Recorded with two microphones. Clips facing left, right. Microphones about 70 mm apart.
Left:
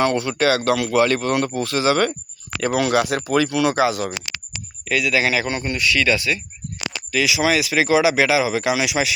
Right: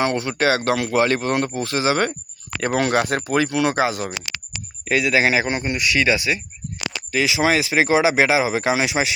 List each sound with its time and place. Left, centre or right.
0.0 s a man's voice: right
7.1 s speech: right